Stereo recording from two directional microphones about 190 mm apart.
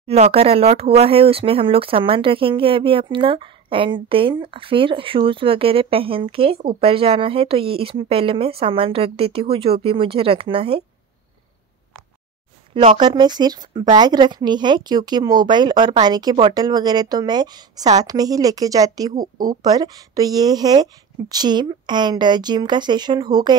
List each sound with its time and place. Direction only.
0.0 s speech: 30° right (ahead or behind)
12.9 s speech: 20° right (ahead or behind)